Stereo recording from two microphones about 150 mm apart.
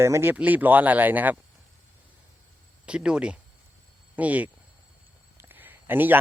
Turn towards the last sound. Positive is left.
turn(degrees=-15)  # may be behind; listen again after turning